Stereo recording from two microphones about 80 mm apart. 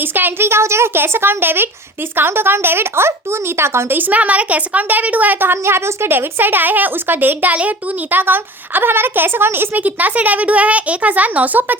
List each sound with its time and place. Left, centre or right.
0.0 s a woman's voice: right